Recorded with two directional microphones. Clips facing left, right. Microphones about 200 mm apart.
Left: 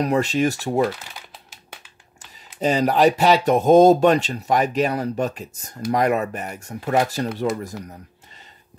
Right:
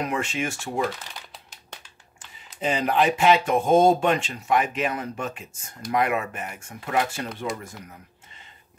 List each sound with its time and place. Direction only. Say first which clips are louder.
0.0 s speech: left 8 dB; 35° left (ahead or behind)
2.6 s speech: left 5 dB; 40° left (ahead or behind)